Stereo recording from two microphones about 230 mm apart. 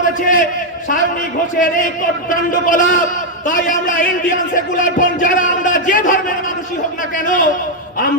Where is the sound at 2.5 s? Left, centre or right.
Left.